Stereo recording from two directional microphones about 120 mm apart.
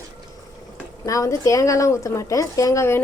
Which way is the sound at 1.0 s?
25° left (ahead or behind).